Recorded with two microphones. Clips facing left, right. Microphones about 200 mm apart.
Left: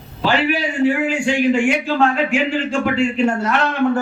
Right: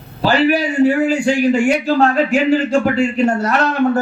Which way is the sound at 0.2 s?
40° right (ahead or behind).